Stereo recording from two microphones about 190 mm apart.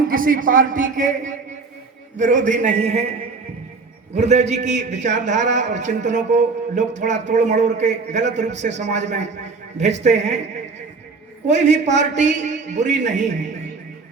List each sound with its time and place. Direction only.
0.1 s a man's voice: 45° right (ahead or behind)
4.2 s a man's voice: 35° right (ahead or behind)